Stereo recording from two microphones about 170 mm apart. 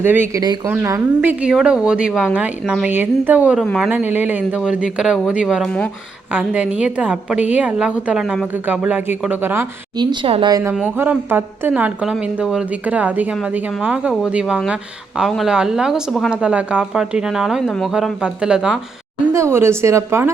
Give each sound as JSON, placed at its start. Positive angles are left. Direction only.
{"t": 0.0, "sound": "a woman's voice", "side_deg": -10}
{"t": 10.0, "sound": "speech", "side_deg": -30}
{"t": 10.6, "sound": "a woman's voice", "side_deg": -10}
{"t": 19.3, "sound": "a woman's voice", "side_deg": -15}